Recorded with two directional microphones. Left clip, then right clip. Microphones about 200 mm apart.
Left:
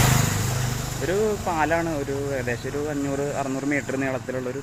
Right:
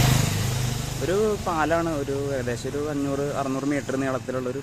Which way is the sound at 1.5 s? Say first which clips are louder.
Left 1 dB; 15° right (ahead or behind).